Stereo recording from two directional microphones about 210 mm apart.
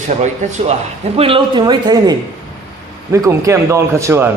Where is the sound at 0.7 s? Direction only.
30° right (ahead or behind); by 4.3 s 10° right (ahead or behind).